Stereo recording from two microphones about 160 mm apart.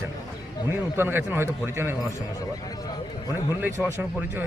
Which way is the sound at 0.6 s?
15° right (ahead or behind).